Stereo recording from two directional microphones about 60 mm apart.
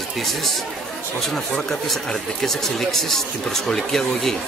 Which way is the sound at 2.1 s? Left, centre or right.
Centre.